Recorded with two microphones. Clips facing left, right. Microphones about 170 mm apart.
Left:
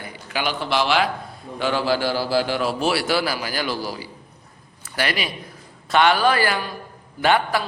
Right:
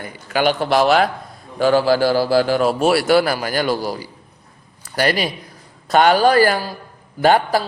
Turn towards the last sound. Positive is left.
turn(degrees=-40)  # may be behind; listen again after turning